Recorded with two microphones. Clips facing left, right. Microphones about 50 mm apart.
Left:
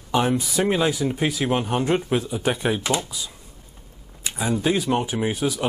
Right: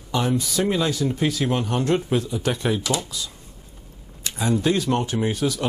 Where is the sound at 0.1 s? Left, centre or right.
Left.